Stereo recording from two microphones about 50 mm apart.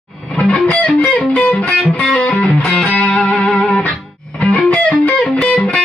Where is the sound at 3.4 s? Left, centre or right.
Left.